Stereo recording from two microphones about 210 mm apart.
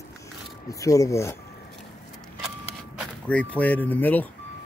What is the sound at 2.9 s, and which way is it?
Speech, 5° left (ahead or behind).